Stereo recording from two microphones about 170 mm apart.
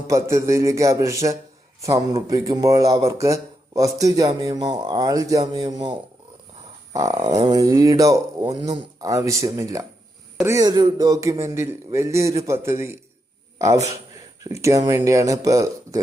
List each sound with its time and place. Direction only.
0.3 s speech: 15° right (ahead or behind)